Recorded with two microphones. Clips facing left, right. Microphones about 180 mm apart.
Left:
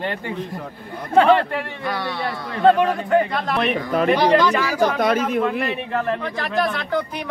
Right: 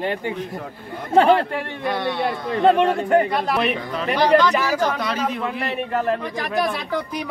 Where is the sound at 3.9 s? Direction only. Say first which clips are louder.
Left 1 dB; 50° left (ahead or behind).